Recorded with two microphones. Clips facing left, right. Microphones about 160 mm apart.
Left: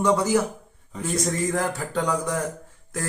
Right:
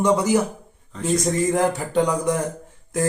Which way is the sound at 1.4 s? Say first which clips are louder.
Right 5 dB; 20° right (ahead or behind).